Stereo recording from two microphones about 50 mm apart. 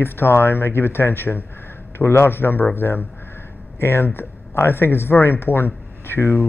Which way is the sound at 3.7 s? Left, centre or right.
Left.